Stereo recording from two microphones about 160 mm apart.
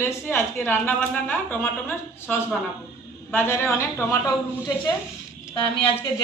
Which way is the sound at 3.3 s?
15° left (ahead or behind).